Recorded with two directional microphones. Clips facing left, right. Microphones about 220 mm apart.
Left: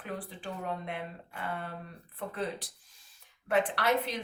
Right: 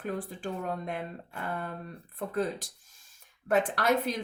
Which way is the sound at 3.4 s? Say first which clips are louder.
Right 2 dB; 45° right (ahead or behind).